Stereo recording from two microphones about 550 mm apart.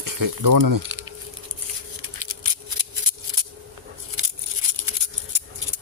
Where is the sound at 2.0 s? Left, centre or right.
Right.